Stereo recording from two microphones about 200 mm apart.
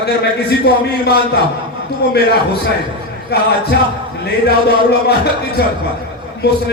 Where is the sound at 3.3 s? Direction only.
55° left (ahead or behind).